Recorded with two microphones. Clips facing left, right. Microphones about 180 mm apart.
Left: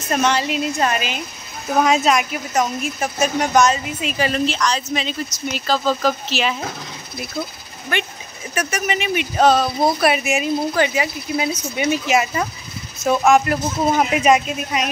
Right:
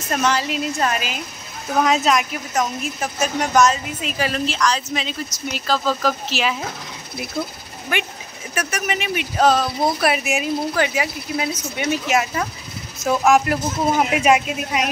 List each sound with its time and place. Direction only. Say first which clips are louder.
0.1 s speech: left 2 dB; centre (ahead or behind)
7.9 s speech: left 1 dB; 10° right (ahead or behind); by 13.3 s 5° left (ahead or behind)
13.3 s speech: even; 5° right (ahead or behind)